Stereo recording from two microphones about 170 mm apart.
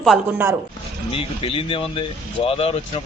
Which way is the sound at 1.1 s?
35° left (ahead or behind).